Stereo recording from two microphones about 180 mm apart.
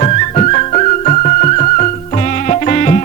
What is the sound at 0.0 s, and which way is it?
Music, 40° left (ahead or behind).